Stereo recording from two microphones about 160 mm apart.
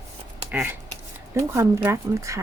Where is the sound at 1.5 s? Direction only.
15° right (ahead or behind).